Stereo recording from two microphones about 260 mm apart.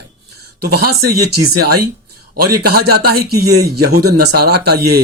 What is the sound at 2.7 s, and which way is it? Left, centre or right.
Speech, right.